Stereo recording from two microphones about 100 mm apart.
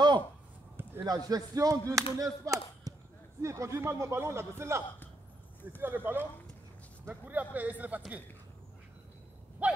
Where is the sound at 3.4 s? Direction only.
30° right (ahead or behind).